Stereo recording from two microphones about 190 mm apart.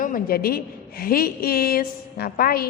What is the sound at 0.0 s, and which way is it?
A woman's voice, 50° left (ahead or behind).